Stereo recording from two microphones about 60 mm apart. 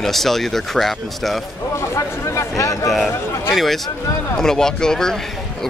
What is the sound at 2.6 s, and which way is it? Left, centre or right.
Speech, left.